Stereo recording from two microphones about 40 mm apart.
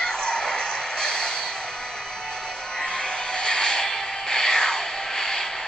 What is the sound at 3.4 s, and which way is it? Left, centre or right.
Vehicle, centre.